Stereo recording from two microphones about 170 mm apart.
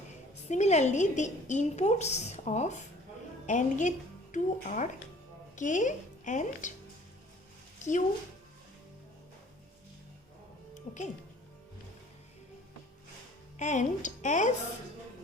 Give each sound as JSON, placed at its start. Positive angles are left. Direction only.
{"t": 0.4, "sound": "a woman's voice", "side_deg": 40}
{"t": 7.8, "sound": "speech", "side_deg": 45}
{"t": 10.9, "sound": "a woman's voice", "side_deg": 50}
{"t": 13.6, "sound": "a woman's voice", "side_deg": 45}